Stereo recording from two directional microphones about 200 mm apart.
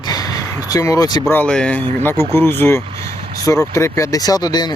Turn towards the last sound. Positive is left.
turn(degrees=20)  # may be behind; listen again after turning